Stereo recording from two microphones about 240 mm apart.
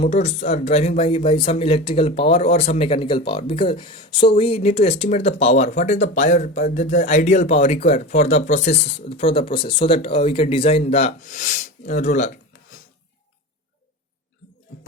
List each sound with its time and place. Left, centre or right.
0.0 s speech: left